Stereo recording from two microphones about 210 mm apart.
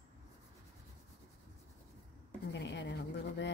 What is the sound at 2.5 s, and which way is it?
Speech, 55° left (ahead or behind).